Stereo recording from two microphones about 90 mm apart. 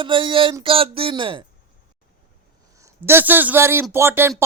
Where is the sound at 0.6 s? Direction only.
90° right; by 1.4 s 70° right (ahead or behind).